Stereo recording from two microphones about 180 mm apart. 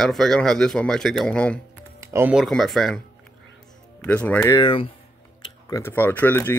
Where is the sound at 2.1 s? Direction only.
10° right (ahead or behind).